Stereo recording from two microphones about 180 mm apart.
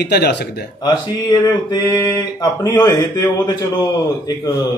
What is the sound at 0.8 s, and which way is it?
Speech, 20° left (ahead or behind).